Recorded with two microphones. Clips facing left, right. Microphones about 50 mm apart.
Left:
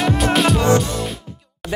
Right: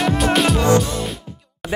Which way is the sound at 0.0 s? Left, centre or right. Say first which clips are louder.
Even; centre.